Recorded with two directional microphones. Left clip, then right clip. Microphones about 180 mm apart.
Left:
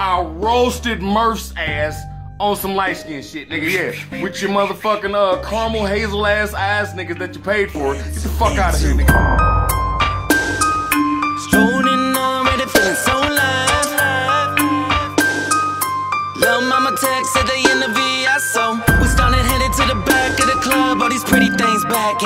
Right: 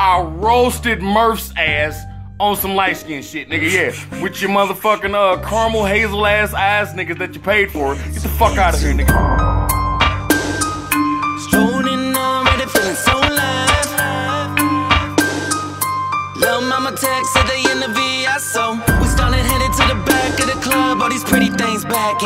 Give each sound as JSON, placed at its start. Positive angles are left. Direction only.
{"t": 0.4, "sound": "speech", "side_deg": -10}
{"t": 8.8, "sound": "music", "side_deg": 0}